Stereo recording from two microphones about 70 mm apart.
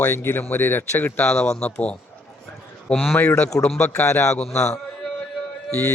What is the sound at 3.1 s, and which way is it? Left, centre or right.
Speech, left.